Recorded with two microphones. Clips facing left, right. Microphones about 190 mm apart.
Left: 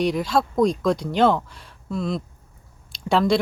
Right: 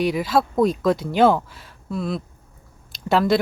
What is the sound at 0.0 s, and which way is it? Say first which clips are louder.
Speech: right 1 dB; 5° right (ahead or behind).